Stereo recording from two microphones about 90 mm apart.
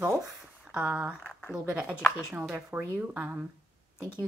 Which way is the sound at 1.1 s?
20° left (ahead or behind).